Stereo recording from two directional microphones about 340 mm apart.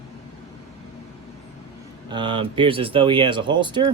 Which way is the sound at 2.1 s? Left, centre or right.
Centre.